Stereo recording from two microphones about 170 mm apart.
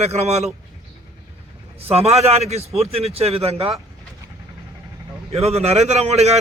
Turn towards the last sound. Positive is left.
turn(degrees=-40)  # may be behind; listen again after turning